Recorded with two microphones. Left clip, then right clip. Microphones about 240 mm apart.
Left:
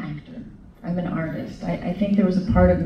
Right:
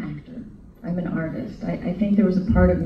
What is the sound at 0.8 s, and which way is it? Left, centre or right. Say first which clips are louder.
Speech: even; centre.